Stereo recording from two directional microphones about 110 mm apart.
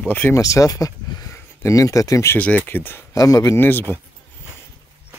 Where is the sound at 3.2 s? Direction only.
30° left (ahead or behind).